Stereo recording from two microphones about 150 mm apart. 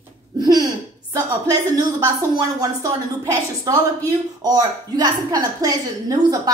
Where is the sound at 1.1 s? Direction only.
25° right (ahead or behind).